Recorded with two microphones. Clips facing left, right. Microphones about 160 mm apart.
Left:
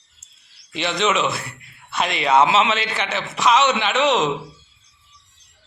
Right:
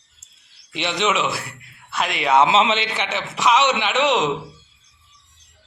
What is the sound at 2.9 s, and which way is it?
A man's voice, 15° right (ahead or behind).